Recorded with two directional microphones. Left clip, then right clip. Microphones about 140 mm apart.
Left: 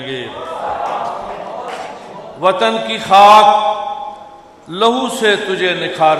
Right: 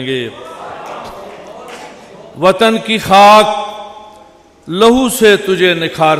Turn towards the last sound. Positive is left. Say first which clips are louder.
# right 1 dB
turn(degrees=-50)  # may be behind; listen again after turning